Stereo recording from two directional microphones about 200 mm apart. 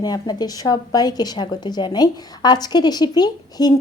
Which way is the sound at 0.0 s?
20° left (ahead or behind).